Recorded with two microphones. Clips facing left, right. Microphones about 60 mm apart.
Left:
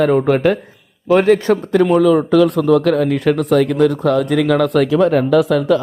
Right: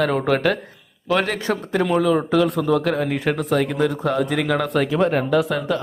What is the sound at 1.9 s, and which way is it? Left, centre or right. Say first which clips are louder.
Speech: left 5 dB; centre.